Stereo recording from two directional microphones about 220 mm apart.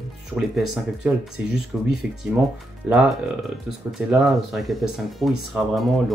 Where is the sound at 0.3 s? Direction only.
Centre (ahead or behind).